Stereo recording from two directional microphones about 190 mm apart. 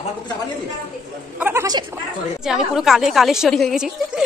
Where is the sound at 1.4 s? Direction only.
15° right (ahead or behind).